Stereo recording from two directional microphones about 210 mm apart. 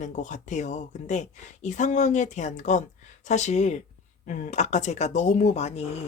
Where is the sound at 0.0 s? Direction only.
35° left (ahead or behind).